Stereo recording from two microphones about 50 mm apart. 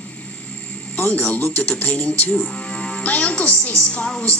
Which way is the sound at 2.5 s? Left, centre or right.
Left.